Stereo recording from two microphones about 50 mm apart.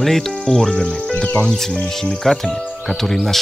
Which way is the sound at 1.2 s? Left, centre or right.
Centre.